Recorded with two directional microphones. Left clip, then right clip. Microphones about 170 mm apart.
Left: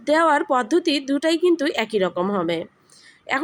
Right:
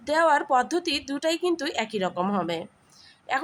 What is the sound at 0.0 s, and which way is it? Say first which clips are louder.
A woman's voice: left 4 dB; 15° left (ahead or behind).